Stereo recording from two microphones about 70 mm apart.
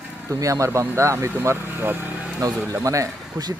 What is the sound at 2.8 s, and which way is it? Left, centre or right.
Speech, right.